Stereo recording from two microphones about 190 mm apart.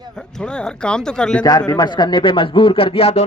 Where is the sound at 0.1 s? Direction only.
5° left (ahead or behind).